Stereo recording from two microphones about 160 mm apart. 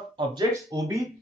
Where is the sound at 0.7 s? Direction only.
20° right (ahead or behind).